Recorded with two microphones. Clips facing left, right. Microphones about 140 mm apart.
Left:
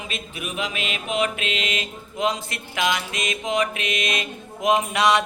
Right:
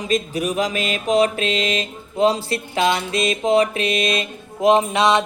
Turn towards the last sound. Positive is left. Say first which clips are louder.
# right 4 dB
turn(degrees=-25)  # may be behind; listen again after turning